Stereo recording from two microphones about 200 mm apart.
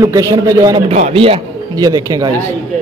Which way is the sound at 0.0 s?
15° right (ahead or behind).